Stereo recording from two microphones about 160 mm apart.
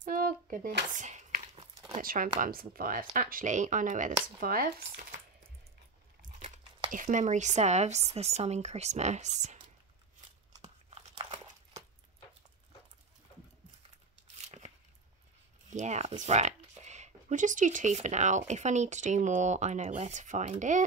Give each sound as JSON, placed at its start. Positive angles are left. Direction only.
{"t": 0.0, "sound": "a sound", "side_deg": -60}
{"t": 2.0, "sound": "speech", "side_deg": -60}
{"t": 6.9, "sound": "speech", "side_deg": -55}
{"t": 10.6, "sound": "crumpling", "side_deg": -40}
{"t": 14.4, "sound": "a sound", "side_deg": -45}
{"t": 15.7, "sound": "speech", "side_deg": -45}